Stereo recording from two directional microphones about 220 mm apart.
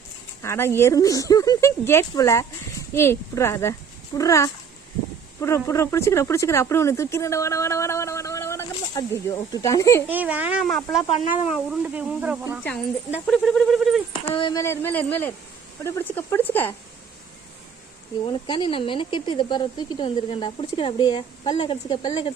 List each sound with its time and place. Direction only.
0.4 s speech: 10° left (ahead or behind)
10.1 s speech: 5° right (ahead or behind)
11.1 s speech: 30° left (ahead or behind)
11.4 s speech: centre (ahead or behind)
14.3 s speech: 20° left (ahead or behind)
18.3 s speech: 20° left (ahead or behind)